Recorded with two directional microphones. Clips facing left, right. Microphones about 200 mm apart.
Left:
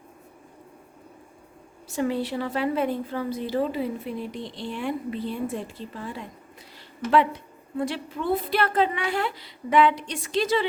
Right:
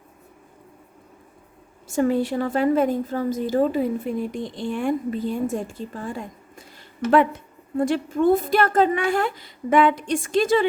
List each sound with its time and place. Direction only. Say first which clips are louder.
1.9 s a woman's voice: right 5 dB; 45° right (ahead or behind)